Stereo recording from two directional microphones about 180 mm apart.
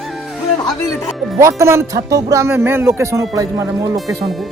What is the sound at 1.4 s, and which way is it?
Speech, 15° right (ahead or behind).